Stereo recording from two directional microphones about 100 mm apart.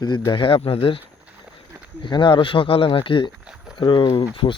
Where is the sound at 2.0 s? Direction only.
50° left (ahead or behind).